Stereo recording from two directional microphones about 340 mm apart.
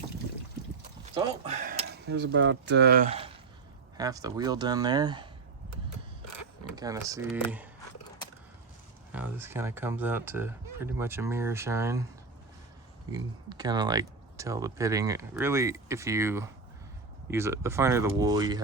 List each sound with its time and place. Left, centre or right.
1.1 s speech: centre
1.9 s cutlery: right
3.9 s speech: centre
6.7 s speech: centre
9.1 s speech: centre
13.1 s speech: centre